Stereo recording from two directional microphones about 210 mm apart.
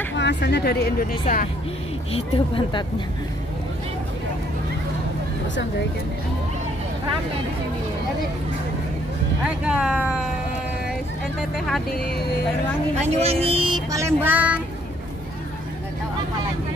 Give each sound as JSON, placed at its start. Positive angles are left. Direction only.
{"t": 0.2, "sound": "speech", "side_deg": 55}
{"t": 2.1, "sound": "a woman's voice", "side_deg": 25}
{"t": 9.4, "sound": "speech", "side_deg": -5}
{"t": 11.5, "sound": "speech", "side_deg": 0}
{"t": 12.9, "sound": "speech", "side_deg": -30}